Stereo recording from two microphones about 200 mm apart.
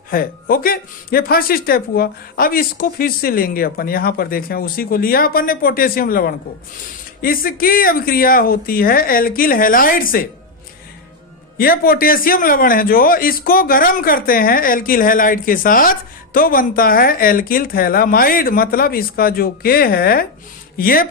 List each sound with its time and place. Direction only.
0.1 s a man's voice: 45° left (ahead or behind)
11.5 s a man's voice: 50° left (ahead or behind)